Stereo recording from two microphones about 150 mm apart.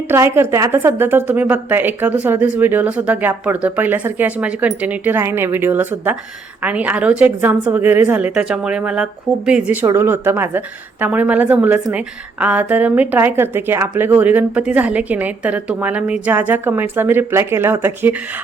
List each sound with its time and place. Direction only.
0.1 s a woman's voice: 15° right (ahead or behind)
9.8 s a woman's voice: 15° right (ahead or behind)